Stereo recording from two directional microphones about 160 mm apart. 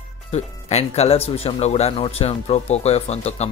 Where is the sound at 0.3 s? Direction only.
40° left (ahead or behind).